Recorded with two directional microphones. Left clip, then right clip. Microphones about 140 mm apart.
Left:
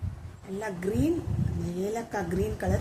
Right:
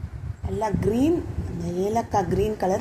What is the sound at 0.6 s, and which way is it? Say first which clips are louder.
A woman's voice: right 7 dB; 20° right (ahead or behind).